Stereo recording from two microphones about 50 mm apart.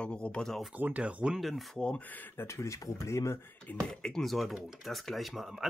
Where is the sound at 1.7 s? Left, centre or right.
Left.